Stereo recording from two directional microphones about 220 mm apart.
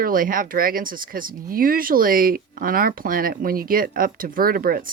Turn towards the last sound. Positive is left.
turn(degrees=-40)  # may be behind; listen again after turning